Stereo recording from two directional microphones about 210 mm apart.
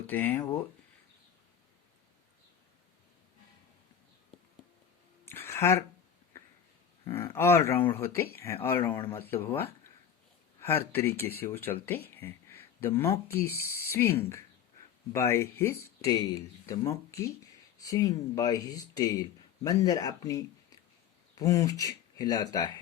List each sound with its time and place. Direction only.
0.1 s speech: 10° left (ahead or behind)
5.2 s a sound: 10° left (ahead or behind)
7.0 s speech: 10° left (ahead or behind)